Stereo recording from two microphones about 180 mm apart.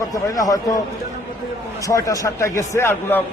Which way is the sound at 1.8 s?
15° left (ahead or behind).